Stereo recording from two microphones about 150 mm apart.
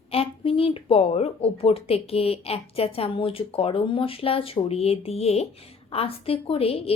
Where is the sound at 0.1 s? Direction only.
40° left (ahead or behind).